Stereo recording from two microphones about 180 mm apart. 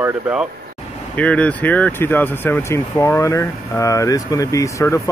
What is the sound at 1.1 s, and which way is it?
Speech, 5° left (ahead or behind).